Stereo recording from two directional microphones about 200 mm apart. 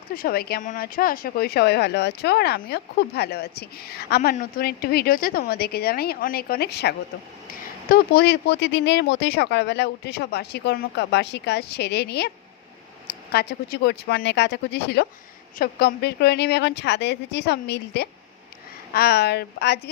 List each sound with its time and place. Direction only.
0.1 s speech: 45° left (ahead or behind)